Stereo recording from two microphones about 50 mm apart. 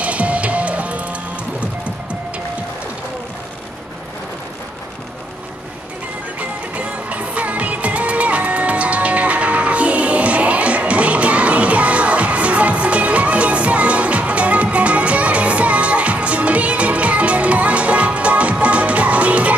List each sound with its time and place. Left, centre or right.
0.0 s music: right
6.7 s music: right